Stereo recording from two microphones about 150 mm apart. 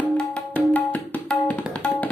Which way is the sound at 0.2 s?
10° left (ahead or behind).